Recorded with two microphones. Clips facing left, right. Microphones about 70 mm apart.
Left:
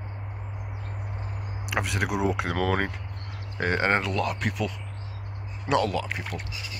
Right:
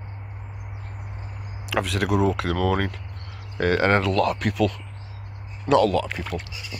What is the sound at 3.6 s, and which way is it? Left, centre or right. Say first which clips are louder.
Speech: right 4 dB; centre.